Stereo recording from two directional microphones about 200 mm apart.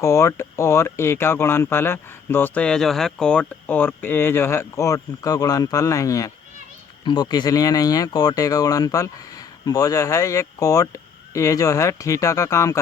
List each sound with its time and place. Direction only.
0.0 s speech: 15° left (ahead or behind)